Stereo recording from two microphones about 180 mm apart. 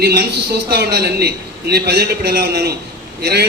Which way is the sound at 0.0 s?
60° right (ahead or behind).